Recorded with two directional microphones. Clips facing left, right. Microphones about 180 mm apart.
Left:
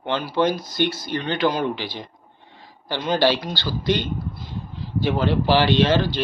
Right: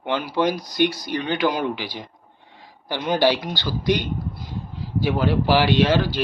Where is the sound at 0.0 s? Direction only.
15° right (ahead or behind).